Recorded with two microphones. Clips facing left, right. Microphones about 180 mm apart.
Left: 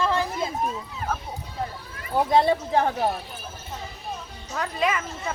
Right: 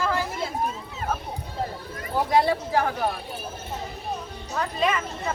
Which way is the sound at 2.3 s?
25° left (ahead or behind).